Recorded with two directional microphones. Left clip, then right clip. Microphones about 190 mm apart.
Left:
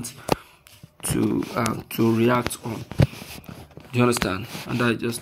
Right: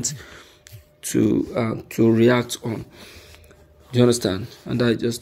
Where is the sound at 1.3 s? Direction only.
10° left (ahead or behind).